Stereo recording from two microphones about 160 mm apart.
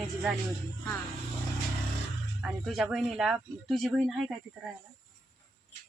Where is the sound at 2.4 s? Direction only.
Centre (ahead or behind).